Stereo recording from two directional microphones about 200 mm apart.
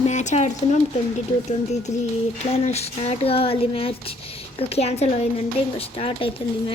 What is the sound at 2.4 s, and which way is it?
Speech, 30° left (ahead or behind).